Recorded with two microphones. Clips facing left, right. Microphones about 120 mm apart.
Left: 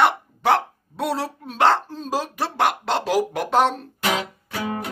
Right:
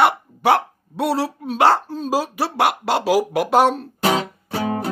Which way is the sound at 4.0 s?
35° right (ahead or behind).